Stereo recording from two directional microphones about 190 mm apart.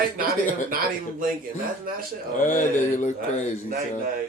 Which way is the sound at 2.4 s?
45° left (ahead or behind).